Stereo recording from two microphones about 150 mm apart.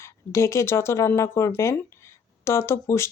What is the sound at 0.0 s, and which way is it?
Speech, 20° left (ahead or behind).